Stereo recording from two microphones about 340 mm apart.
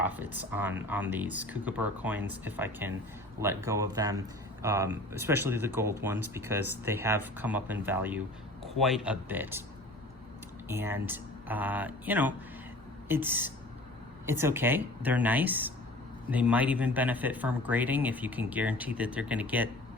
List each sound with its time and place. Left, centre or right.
0.0 s speech: centre
10.7 s speech: centre